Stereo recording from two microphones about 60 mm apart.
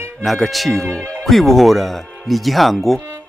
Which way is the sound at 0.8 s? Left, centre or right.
Centre.